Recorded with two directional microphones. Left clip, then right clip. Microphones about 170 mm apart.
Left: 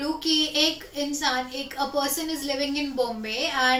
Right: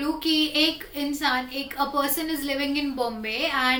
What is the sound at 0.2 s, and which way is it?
A woman's voice, 10° right (ahead or behind).